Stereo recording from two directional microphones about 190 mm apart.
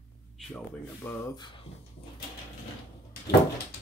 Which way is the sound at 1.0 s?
15° left (ahead or behind).